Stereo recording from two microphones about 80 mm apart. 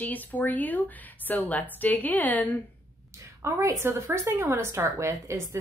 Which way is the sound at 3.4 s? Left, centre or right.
Right.